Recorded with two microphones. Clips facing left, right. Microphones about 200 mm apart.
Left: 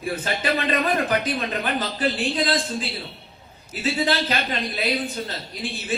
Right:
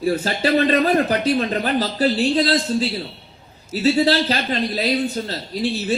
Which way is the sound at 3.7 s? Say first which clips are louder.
Right 7 dB; 35° right (ahead or behind).